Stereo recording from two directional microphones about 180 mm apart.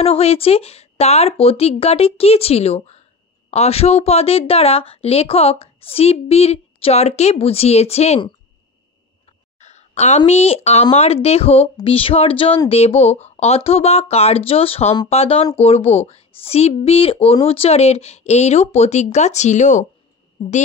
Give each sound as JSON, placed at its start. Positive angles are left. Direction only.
{"t": 0.0, "sound": "a woman's voice", "side_deg": 35}
{"t": 9.6, "sound": "a woman's voice", "side_deg": 40}
{"t": 20.4, "sound": "a woman's voice", "side_deg": 30}